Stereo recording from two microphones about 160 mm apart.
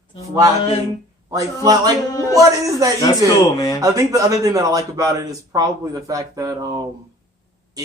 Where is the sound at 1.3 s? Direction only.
25° right (ahead or behind).